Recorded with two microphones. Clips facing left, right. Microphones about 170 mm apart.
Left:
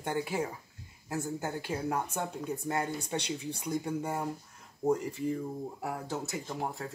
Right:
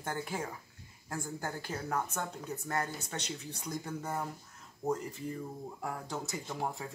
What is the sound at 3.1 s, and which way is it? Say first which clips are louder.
Speech: left 6 dB; 15° left (ahead or behind).